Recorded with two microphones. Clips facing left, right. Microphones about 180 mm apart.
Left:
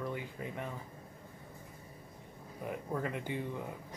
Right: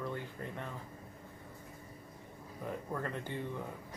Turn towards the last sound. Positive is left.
turn(degrees=10)  # may be behind; listen again after turning